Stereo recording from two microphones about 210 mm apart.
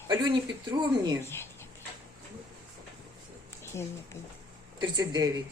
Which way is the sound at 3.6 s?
10° left (ahead or behind).